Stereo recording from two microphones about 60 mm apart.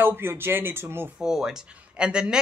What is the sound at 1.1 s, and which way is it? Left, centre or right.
Speech, centre.